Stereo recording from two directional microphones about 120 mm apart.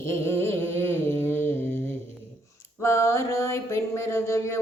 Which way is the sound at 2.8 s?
25° left (ahead or behind).